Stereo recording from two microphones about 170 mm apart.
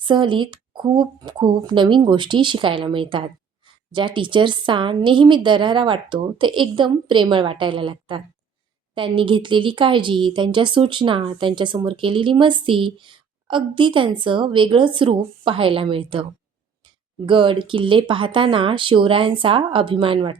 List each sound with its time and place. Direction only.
0.0 s speech: 30° right (ahead or behind)
17.2 s speech: 30° right (ahead or behind)